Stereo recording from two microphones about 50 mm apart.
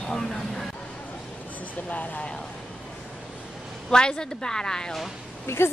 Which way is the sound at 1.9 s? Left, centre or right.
Left.